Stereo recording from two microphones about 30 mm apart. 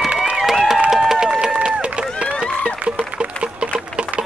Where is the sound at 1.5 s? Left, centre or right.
Right.